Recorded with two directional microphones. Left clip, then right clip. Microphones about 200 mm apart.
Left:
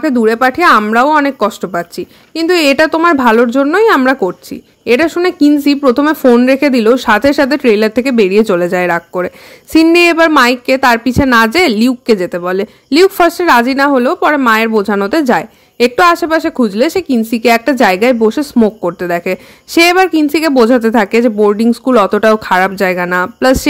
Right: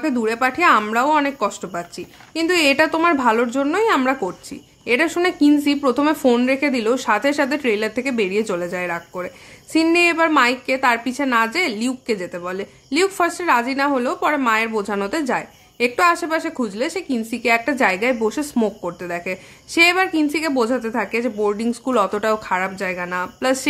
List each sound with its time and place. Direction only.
0.0 s a woman's voice: 35° left (ahead or behind)